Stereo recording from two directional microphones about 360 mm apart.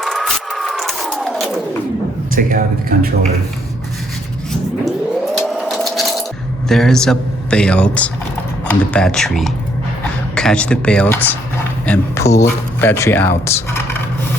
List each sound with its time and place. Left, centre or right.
0.0 s a sound: centre
2.3 s speech: right
5.4 s sewing machine: centre
6.7 s speech: centre